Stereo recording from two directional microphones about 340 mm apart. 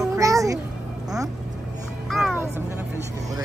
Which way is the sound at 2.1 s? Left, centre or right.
Centre.